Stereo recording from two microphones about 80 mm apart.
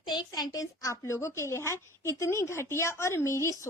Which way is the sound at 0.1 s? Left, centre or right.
Left.